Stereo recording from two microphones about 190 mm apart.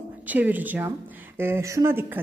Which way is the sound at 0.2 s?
10° right (ahead or behind).